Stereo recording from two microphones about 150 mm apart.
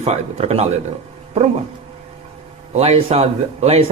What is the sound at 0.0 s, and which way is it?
Speech, 45° right (ahead or behind).